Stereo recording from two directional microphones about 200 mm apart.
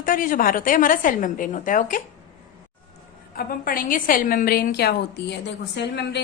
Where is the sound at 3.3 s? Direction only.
45° left (ahead or behind).